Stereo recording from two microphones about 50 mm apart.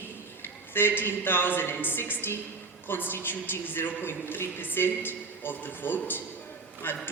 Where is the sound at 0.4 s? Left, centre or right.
Left.